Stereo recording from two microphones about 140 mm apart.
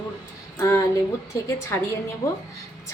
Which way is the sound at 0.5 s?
20° left (ahead or behind).